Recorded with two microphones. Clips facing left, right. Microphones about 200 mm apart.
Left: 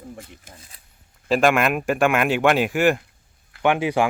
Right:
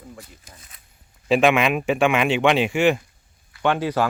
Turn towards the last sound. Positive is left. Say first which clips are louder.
# left 1 dB
turn(degrees=15)  # may be behind; listen again after turning